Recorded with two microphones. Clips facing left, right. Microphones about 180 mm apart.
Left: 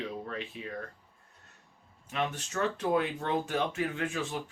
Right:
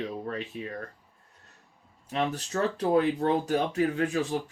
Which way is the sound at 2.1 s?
35° right (ahead or behind).